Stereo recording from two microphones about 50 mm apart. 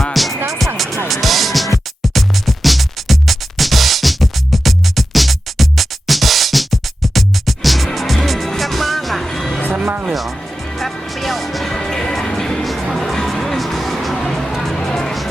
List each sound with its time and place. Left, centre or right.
0.0 s music: centre
9.7 s music: right
10.1 s music: centre
12.6 s music: centre